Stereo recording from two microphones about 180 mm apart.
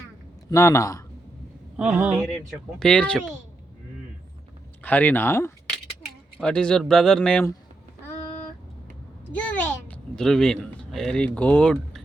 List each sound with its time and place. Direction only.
0.5 s speech: 15° left (ahead or behind)
1.7 s speech: 5° right (ahead or behind)
4.8 s speech: 10° left (ahead or behind)
9.3 s a man's voice: 10° left (ahead or behind)